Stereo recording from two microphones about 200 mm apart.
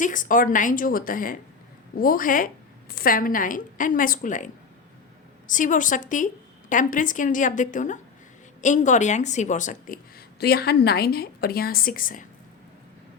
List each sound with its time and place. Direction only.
0.0 s a woman's voice: 40° left (ahead or behind)
10.4 s a woman's voice: 50° left (ahead or behind)